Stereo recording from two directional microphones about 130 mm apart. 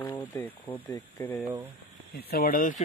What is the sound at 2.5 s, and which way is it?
Speech, 90° left.